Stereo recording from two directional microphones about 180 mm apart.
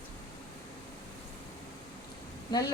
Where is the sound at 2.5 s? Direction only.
25° left (ahead or behind).